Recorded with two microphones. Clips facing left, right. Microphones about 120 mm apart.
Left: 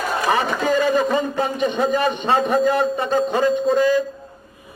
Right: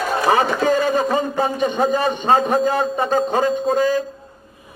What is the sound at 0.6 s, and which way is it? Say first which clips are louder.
A man's voice: right 1 dB; 40° right (ahead or behind).